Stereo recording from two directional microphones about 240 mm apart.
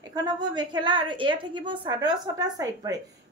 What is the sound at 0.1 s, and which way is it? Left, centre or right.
A woman's voice, centre.